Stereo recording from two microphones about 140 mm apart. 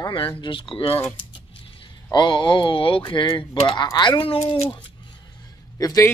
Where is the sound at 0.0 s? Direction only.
35° left (ahead or behind).